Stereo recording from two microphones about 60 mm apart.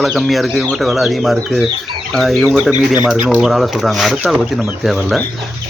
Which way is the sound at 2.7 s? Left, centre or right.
Right.